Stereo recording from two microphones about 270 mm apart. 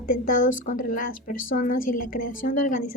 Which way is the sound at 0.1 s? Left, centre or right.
Left.